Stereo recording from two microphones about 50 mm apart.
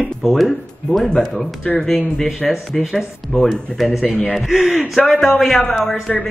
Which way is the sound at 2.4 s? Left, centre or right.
Centre.